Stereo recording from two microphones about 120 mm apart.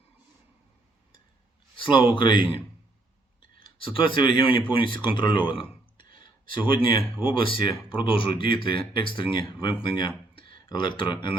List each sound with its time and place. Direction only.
1.7 s speech: 45° left (ahead or behind)
3.6 s speech: 45° left (ahead or behind)